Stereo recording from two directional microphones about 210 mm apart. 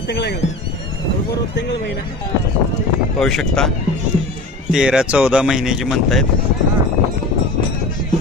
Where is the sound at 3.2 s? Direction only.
Centre (ahead or behind).